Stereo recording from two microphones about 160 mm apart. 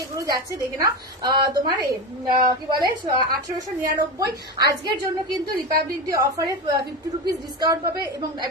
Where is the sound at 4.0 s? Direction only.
25° right (ahead or behind).